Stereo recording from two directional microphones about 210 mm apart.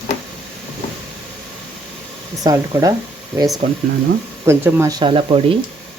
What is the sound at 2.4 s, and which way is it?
Speech, 15° right (ahead or behind).